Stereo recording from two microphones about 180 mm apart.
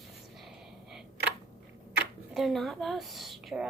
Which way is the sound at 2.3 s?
Centre (ahead or behind).